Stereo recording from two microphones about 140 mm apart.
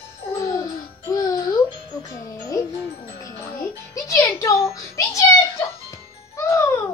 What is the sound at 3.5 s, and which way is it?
A child's voice, 25° left (ahead or behind).